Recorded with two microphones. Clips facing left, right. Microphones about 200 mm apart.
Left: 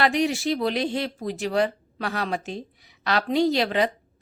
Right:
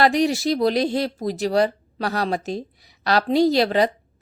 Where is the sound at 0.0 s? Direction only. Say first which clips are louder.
Right 4 dB; 35° right (ahead or behind).